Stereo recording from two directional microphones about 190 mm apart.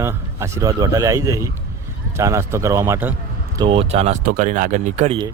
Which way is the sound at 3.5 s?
30° right (ahead or behind).